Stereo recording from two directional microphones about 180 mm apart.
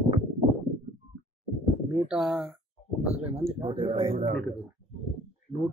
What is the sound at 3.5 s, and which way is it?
Speech, 25° right (ahead or behind).